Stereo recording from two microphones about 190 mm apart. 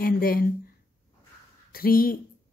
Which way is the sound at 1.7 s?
50° left (ahead or behind).